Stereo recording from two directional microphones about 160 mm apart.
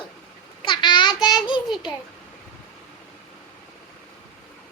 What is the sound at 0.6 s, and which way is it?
Child singing, 30° left (ahead or behind).